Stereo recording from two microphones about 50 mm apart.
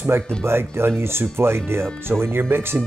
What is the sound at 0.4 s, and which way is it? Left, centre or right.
Speech, right.